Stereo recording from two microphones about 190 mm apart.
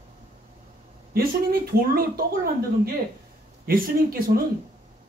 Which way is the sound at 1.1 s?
50° right (ahead or behind).